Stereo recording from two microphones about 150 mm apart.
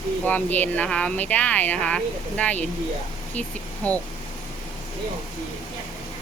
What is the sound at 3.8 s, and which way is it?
Speech, 10° left (ahead or behind).